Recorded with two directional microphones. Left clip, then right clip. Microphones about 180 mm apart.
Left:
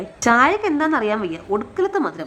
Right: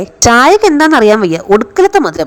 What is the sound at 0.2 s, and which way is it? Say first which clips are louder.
A woman's voice: right 10 dB; 40° right (ahead or behind).